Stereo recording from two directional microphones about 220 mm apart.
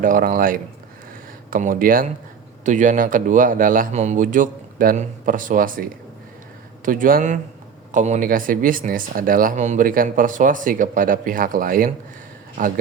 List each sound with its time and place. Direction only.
0.0 s a man's voice: 40° right (ahead or behind)